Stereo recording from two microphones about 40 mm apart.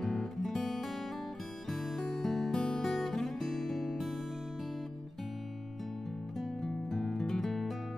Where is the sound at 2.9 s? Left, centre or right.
Centre.